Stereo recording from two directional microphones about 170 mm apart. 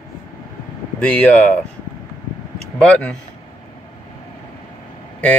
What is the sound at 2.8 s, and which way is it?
Speech, 5° left (ahead or behind).